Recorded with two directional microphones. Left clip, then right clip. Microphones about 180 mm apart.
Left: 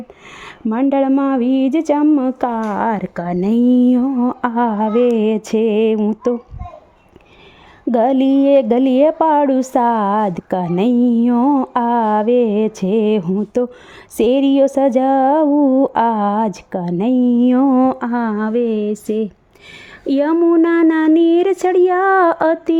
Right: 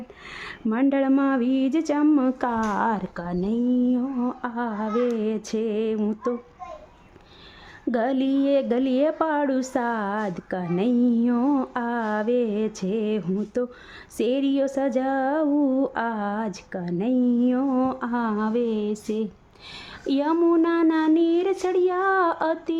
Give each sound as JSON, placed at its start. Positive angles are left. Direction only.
{"t": 0.3, "sound": "speech", "side_deg": 25}
{"t": 3.5, "sound": "a sound", "side_deg": 50}
{"t": 5.1, "sound": "a woman's voice", "side_deg": 40}
{"t": 7.9, "sound": "a woman's voice", "side_deg": 30}